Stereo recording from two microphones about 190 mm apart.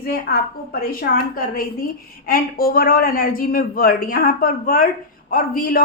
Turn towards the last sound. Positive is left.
turn(degrees=50)  # may be behind; listen again after turning